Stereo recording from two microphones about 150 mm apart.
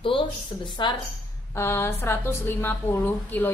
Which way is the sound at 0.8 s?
30° left (ahead or behind).